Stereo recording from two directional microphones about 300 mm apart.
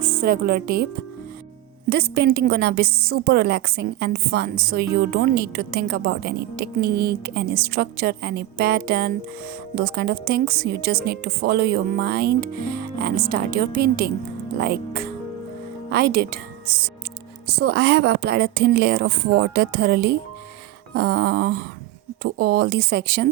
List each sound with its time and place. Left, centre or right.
0.0 s a woman's voice: right
1.9 s a woman's voice: right